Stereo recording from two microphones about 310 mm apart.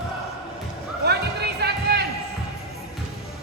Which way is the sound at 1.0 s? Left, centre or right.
Right.